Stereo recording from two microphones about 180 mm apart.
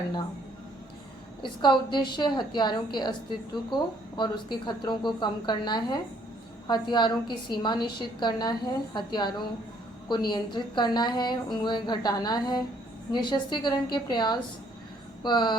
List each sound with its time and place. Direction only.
1.4 s a woman's voice: 25° left (ahead or behind)